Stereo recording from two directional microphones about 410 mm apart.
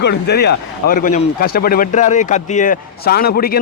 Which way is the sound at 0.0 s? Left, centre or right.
Left.